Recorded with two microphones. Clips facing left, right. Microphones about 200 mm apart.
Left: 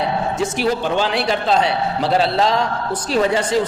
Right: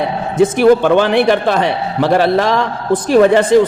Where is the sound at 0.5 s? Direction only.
55° right (ahead or behind).